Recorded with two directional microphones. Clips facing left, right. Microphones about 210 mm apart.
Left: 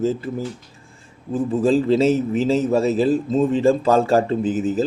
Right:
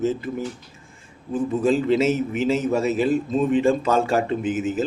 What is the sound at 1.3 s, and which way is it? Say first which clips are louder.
Speech: left 3 dB; 35° left (ahead or behind).